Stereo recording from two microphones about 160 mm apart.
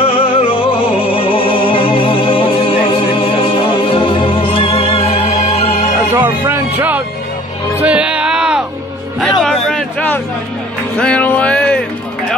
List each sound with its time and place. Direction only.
0.0 s music: 35° left (ahead or behind)
6.2 s music: 15° right (ahead or behind)
9.4 s a sound: 5° left (ahead or behind)